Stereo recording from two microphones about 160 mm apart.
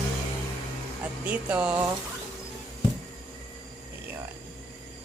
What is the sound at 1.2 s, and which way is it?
Speech, 5° right (ahead or behind).